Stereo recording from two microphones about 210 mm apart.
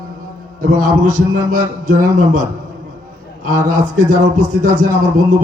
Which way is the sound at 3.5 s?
35° right (ahead or behind).